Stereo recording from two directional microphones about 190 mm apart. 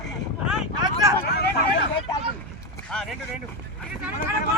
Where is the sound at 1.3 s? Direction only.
60° left (ahead or behind).